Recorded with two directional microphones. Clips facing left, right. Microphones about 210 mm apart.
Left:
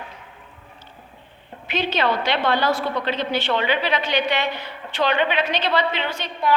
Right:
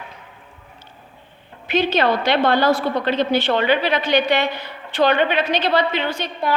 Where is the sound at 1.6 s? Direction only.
45° right (ahead or behind).